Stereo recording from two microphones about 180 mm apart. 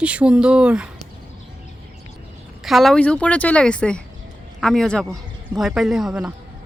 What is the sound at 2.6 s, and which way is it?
A woman's voice, centre (ahead or behind).